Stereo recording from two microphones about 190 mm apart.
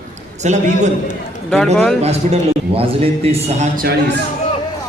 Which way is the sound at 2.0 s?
35° right (ahead or behind).